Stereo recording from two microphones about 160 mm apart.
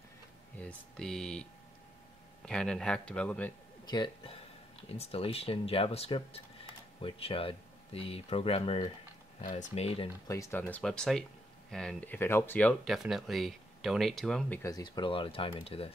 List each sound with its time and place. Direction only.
0.6 s speech: 5° left (ahead or behind)
2.4 s speech: 5° left (ahead or behind)
3.8 s speech: 25° left (ahead or behind)
9.4 s speech: 50° left (ahead or behind)
10.2 s speech: 20° left (ahead or behind)
10.8 s speech: 5° left (ahead or behind)
12.9 s speech: centre (ahead or behind)
14.6 s speech: 25° left (ahead or behind)